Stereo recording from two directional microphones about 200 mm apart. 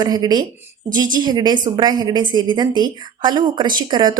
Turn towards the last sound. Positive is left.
turn(degrees=-20)  # may be behind; listen again after turning